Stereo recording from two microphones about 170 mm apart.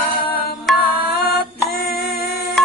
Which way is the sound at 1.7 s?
65° left (ahead or behind).